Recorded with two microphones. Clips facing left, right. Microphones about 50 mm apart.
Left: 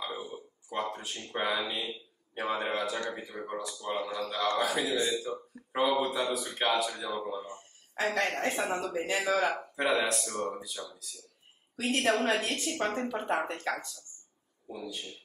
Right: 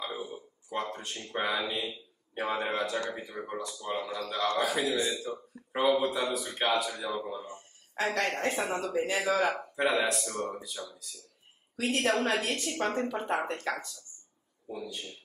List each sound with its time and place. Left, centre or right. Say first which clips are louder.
0.0 s speech: right 1 dB; centre
12.2 s speech: even; centre
13.5 s speech: even; centre